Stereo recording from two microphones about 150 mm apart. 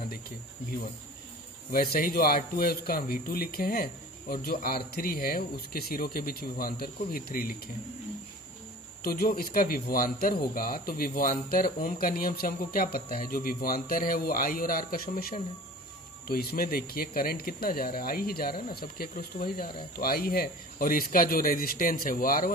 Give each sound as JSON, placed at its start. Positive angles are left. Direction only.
{"t": 1.7, "sound": "speech", "side_deg": 75}
{"t": 9.0, "sound": "speech", "side_deg": 90}
{"t": 16.3, "sound": "speech", "side_deg": 85}